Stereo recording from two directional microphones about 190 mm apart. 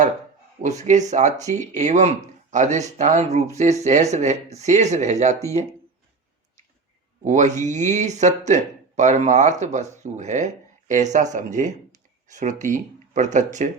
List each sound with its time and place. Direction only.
0.6 s speech: 40° right (ahead or behind)
7.2 s speech: 40° right (ahead or behind)